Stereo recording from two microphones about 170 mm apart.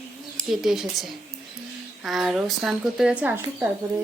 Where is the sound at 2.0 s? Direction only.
Centre (ahead or behind).